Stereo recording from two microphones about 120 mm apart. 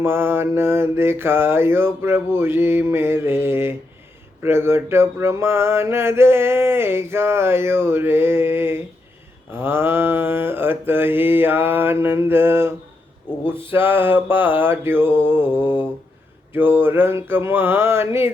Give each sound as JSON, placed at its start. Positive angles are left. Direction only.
{"t": 0.0, "sound": "mantra", "side_deg": -20}